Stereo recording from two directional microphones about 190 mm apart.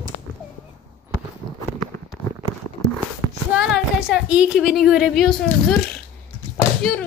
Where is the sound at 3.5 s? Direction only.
5° right (ahead or behind).